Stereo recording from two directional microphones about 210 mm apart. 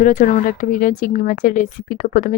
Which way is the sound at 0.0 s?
40° left (ahead or behind).